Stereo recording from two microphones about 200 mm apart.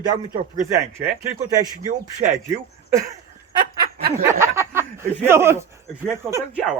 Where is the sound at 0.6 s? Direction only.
15° right (ahead or behind).